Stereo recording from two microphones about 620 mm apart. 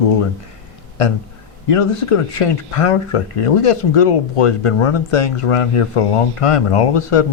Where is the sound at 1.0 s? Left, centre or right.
Left.